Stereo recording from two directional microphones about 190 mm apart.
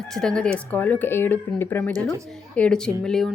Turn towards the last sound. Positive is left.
turn(degrees=5)  # may be behind; listen again after turning